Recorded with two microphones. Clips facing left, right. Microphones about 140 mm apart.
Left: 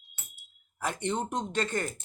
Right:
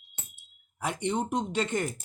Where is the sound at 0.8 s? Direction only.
10° right (ahead or behind).